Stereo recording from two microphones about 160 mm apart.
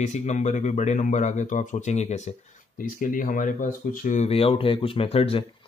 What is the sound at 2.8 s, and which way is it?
Speech, 55° left (ahead or behind).